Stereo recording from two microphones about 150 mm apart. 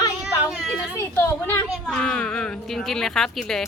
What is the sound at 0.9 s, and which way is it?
Speech, 15° left (ahead or behind).